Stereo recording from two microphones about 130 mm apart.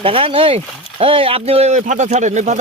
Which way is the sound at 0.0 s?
45° right (ahead or behind).